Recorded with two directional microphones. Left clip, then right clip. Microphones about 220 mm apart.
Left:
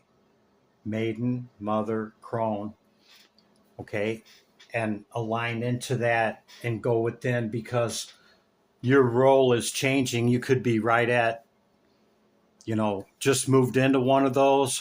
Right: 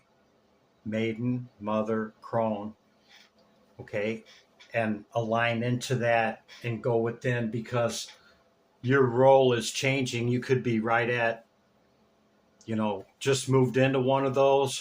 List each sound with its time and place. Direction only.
0.9 s speech: 35° left (ahead or behind)
3.8 s speech: 40° left (ahead or behind)
4.7 s speech: 30° left (ahead or behind); by 11.3 s 45° left (ahead or behind)
12.5 s speech: 45° left (ahead or behind)